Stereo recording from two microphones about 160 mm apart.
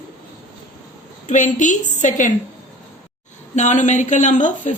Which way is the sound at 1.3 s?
50° left (ahead or behind).